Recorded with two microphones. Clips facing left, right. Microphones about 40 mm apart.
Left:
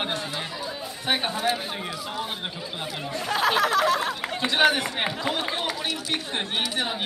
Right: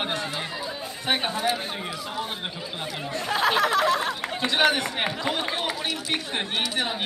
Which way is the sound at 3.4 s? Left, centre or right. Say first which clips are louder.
Even; right.